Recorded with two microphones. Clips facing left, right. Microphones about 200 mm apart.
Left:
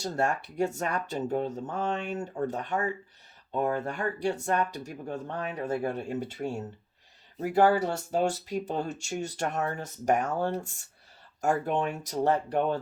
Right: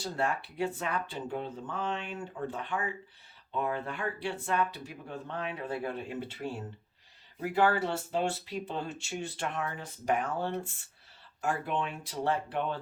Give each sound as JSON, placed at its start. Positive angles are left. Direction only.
{"t": 0.0, "sound": "speech", "side_deg": 45}